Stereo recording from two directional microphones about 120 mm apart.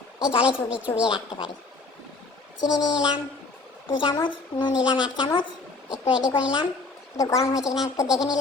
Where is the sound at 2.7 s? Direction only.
40° left (ahead or behind).